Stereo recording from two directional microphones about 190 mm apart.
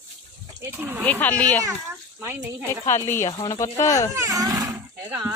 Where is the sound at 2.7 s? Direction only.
15° left (ahead or behind).